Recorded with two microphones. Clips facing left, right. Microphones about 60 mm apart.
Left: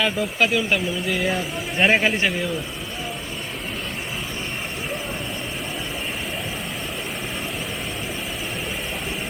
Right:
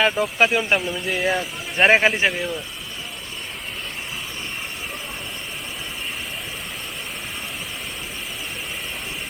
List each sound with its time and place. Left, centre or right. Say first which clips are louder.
0.0 s a man's voice: right 3 dB; right